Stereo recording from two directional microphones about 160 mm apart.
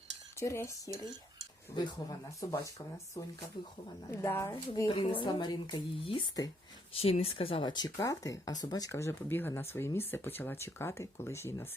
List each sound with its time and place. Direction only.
0.3 s speech: 15° left (ahead or behind)
4.9 s speech: 30° left (ahead or behind)
6.9 s speech: 35° left (ahead or behind); by 11.7 s 15° left (ahead or behind)